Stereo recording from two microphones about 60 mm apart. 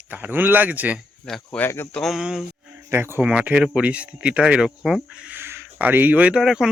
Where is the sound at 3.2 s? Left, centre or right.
Right.